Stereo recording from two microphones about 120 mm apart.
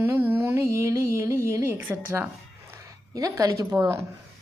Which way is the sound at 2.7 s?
25° right (ahead or behind).